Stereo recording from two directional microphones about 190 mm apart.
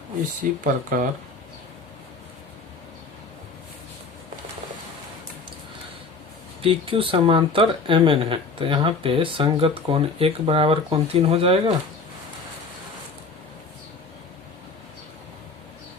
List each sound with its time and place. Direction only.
0.6 s speech: 45° right (ahead or behind)
6.6 s speech: 30° right (ahead or behind)